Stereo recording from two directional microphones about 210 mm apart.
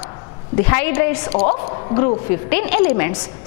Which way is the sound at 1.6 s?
30° left (ahead or behind).